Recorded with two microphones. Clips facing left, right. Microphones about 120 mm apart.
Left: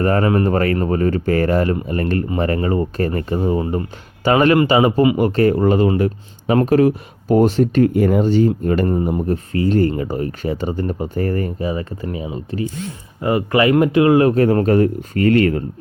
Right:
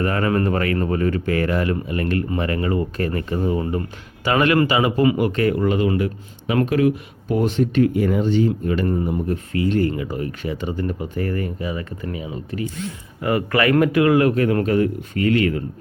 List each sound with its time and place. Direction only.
0.0 s speech: 35° left (ahead or behind)
8.9 s speech: 30° left (ahead or behind)